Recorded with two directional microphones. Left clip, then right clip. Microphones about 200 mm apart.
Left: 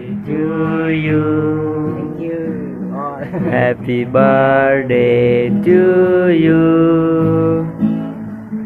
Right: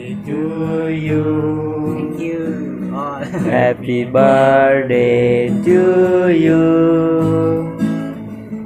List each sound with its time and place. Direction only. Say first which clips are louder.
3.5 s mantra: right 1 dB; 15° right (ahead or behind)